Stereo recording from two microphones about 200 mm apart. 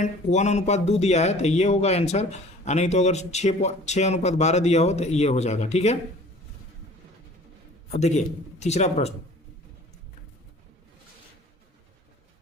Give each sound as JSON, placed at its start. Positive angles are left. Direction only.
{"t": 0.0, "sound": "speech", "side_deg": 35}
{"t": 7.9, "sound": "speech", "side_deg": 35}